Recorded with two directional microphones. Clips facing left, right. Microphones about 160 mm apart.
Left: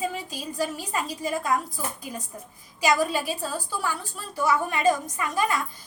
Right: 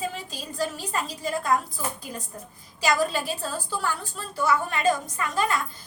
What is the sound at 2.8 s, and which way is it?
A woman's voice, 15° left (ahead or behind).